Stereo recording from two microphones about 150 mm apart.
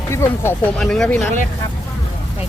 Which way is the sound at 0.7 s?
5° left (ahead or behind).